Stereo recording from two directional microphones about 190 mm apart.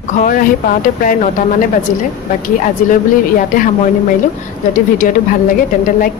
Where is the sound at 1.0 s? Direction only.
45° left (ahead or behind).